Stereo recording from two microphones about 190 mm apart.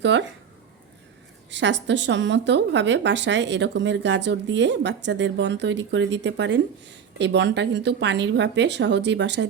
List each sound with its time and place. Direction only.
0.0 s speech: 70° right (ahead or behind)
1.5 s speech: 70° right (ahead or behind)